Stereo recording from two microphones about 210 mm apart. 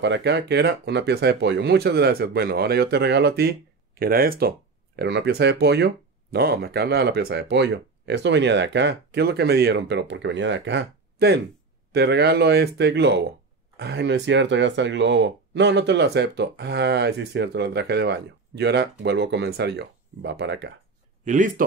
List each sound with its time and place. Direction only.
0.0 s speech: 55° right (ahead or behind)
21.2 s a man's voice: 35° right (ahead or behind)